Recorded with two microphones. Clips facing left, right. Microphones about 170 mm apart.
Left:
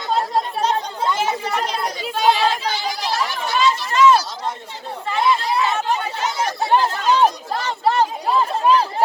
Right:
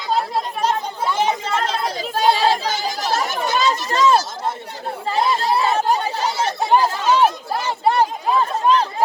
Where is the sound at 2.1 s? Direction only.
35° right (ahead or behind).